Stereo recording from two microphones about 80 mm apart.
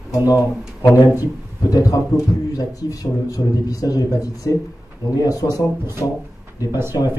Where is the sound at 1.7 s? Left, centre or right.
Left.